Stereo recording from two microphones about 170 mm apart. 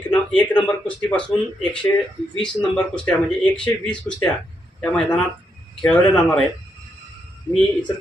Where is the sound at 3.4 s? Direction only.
25° left (ahead or behind).